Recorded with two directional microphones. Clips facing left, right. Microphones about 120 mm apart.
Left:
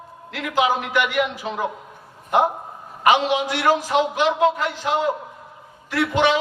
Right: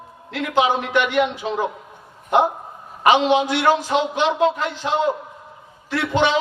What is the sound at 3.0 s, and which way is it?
A man's voice, 30° right (ahead or behind).